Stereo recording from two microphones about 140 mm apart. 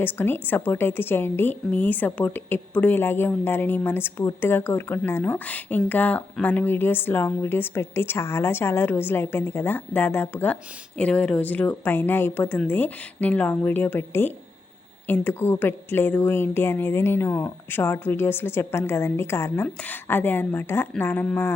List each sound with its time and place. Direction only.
0.0 s a woman's voice: 15° left (ahead or behind)